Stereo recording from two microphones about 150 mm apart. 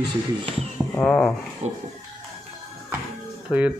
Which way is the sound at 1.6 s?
50° right (ahead or behind).